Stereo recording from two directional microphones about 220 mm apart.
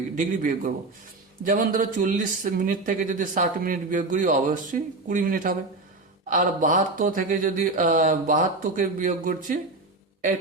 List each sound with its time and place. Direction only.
0.2 s speech: 35° right (ahead or behind)